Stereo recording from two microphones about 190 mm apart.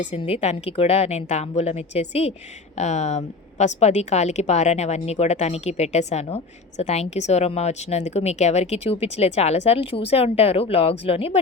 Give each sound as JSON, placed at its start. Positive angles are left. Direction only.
{"t": 0.0, "sound": "a woman's voice", "side_deg": 35}